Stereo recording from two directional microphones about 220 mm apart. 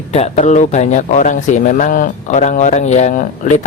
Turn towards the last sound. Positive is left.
turn(degrees=35)  # may be behind; listen again after turning